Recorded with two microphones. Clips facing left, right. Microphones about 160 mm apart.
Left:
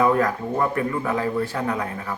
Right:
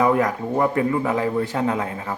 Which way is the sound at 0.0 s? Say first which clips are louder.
Right 1 dB; 20° right (ahead or behind).